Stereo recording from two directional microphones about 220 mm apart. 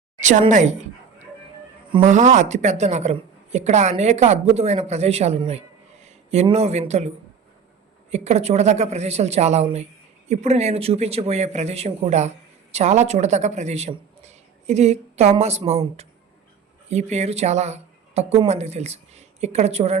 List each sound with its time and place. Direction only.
0.2 s a woman's voice: 35° right (ahead or behind)
2.0 s a woman's voice: 35° right (ahead or behind)
8.1 s a woman's voice: 30° right (ahead or behind)